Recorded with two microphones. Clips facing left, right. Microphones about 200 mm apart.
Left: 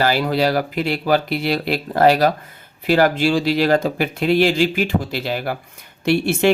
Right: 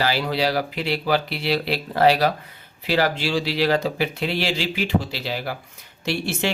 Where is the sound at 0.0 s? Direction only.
50° left (ahead or behind).